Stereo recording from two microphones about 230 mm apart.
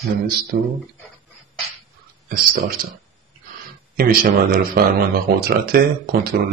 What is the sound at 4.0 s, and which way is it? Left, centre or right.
Speech, right.